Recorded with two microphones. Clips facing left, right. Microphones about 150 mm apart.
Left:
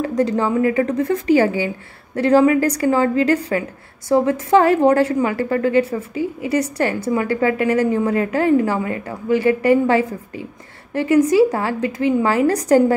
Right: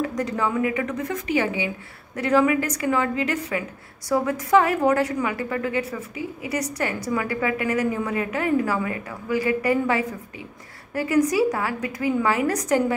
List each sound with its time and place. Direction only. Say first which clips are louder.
0.0 s a woman's voice: left 6 dB; 30° left (ahead or behind)